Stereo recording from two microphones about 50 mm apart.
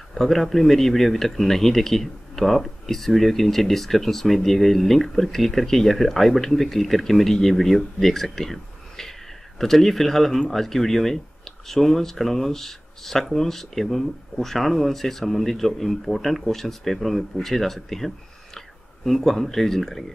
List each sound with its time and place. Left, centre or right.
0.1 s speech: centre